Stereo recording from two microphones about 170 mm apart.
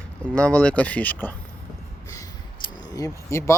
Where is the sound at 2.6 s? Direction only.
20° left (ahead or behind).